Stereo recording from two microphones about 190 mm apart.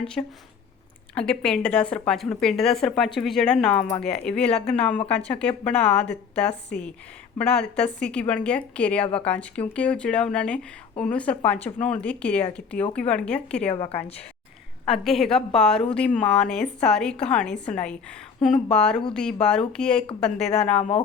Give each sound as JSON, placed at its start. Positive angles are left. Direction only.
{"t": 0.0, "sound": "a woman's voice", "side_deg": 5}
{"t": 13.7, "sound": "a woman's voice", "side_deg": 30}
{"t": 15.0, "sound": "speech", "side_deg": 0}
{"t": 20.1, "sound": "a woman's voice", "side_deg": 30}